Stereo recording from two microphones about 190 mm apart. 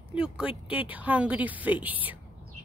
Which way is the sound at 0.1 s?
5° right (ahead or behind).